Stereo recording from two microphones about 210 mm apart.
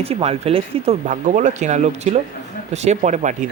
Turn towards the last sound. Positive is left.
turn(degrees=-35)  # may be behind; listen again after turning